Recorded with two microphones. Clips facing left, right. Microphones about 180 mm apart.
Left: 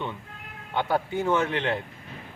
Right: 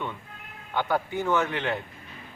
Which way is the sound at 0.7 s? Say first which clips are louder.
Left 1 dB; 25° left (ahead or behind).